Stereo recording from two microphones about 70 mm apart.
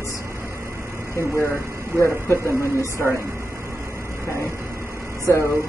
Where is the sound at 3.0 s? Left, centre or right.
Centre.